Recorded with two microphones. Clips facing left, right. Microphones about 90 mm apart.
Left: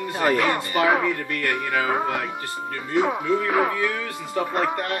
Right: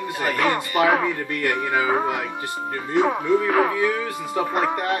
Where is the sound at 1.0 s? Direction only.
15° right (ahead or behind).